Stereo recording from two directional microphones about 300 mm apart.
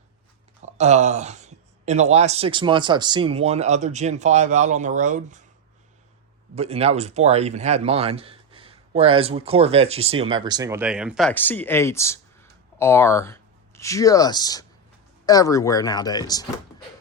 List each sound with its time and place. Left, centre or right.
0.6 s speech: right
6.6 s speech: centre